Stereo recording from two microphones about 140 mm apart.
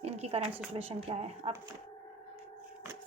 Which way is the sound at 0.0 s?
45° right (ahead or behind).